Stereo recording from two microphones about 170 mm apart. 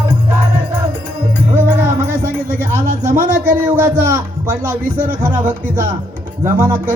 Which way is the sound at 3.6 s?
15° right (ahead or behind).